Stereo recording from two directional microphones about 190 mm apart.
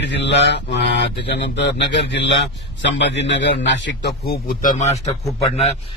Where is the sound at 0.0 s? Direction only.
65° left (ahead or behind).